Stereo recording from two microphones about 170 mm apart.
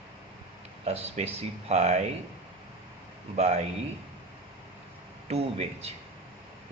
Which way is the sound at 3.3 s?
40° right (ahead or behind).